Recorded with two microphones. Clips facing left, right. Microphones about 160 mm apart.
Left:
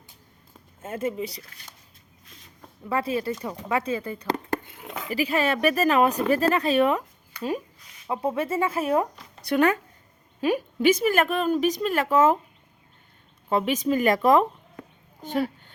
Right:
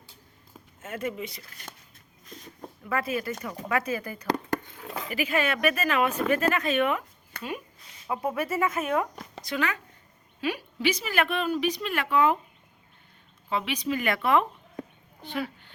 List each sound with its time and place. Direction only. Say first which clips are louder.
0.8 s speech: left 4 dB; 30° left (ahead or behind)
2.9 s speech: left 3 dB; 30° left (ahead or behind)
8.0 s speech: left 3 dB; 25° left (ahead or behind)
9.5 s a woman's voice: left 9 dB; 50° left (ahead or behind)
13.5 s a woman's voice: left 6 dB; 45° left (ahead or behind)
15.2 s a sound: left 6 dB; 40° left (ahead or behind)